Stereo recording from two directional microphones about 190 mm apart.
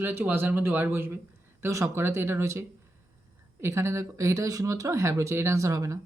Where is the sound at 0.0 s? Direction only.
10° right (ahead or behind).